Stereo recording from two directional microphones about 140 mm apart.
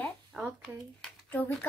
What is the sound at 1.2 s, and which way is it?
Speech, 15° left (ahead or behind).